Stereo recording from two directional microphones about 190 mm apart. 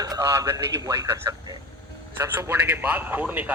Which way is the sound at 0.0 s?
15° right (ahead or behind).